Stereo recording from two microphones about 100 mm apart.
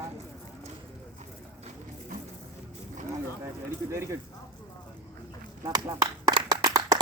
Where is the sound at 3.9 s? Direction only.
25° right (ahead or behind).